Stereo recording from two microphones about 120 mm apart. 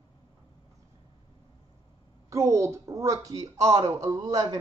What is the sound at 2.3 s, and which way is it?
Speech, 25° right (ahead or behind).